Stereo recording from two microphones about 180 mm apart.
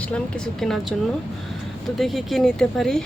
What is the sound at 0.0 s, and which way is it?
Speech, 5° left (ahead or behind).